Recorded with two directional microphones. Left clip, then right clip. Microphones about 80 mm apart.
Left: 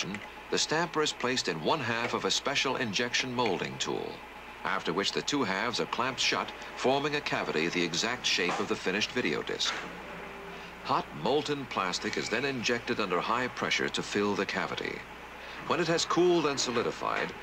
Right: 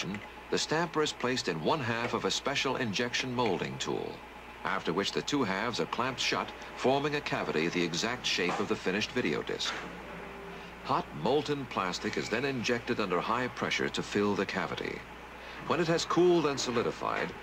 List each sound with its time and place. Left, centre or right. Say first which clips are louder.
0.0 s speech: left 2 dB; right
7.4 s speech: left 1 dB; right
10.9 s speech: left 1 dB; right